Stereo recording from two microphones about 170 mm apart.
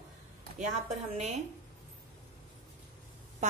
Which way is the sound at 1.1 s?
45° right (ahead or behind).